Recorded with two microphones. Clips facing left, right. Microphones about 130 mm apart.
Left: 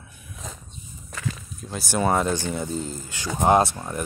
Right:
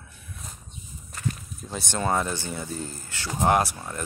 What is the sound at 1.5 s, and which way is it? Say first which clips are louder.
Speech: left 1 dB; centre (ahead or behind).